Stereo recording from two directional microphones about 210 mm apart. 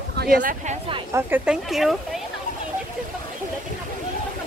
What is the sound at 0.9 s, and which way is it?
Speech, 10° right (ahead or behind).